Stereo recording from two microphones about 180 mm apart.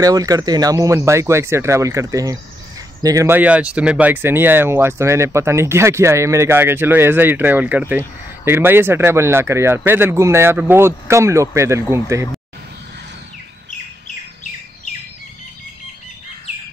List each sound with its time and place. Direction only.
0.0 s speech: 20° right (ahead or behind)